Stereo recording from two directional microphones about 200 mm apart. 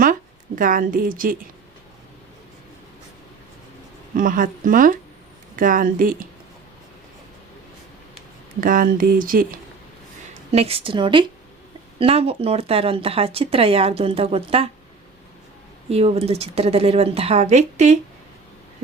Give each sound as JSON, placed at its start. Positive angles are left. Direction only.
{"t": 0.0, "sound": "a woman's voice", "side_deg": -45}
{"t": 4.1, "sound": "speech", "side_deg": -45}
{"t": 8.6, "sound": "speech", "side_deg": -45}
{"t": 10.5, "sound": "speech", "side_deg": -30}
{"t": 15.9, "sound": "speech", "side_deg": -30}